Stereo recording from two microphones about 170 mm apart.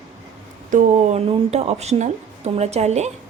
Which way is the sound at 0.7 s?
45° right (ahead or behind).